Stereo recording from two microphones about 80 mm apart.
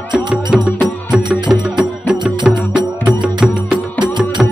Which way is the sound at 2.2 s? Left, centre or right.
Right.